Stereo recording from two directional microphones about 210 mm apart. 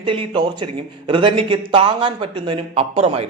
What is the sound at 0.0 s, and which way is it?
Speech, 25° right (ahead or behind).